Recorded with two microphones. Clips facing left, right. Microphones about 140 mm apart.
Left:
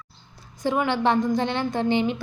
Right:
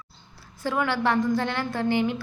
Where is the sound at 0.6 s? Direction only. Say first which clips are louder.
Left 3 dB; 20° left (ahead or behind).